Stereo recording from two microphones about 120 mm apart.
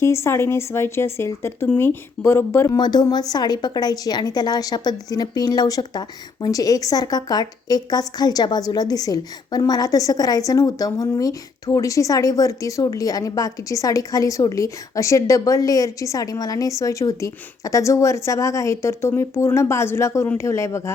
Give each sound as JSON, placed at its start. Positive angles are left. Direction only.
{"t": 0.0, "sound": "a woman's voice", "side_deg": 20}
{"t": 2.7, "sound": "a woman's voice", "side_deg": 35}